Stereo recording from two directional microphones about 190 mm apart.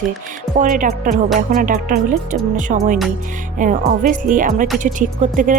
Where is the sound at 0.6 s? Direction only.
45° right (ahead or behind).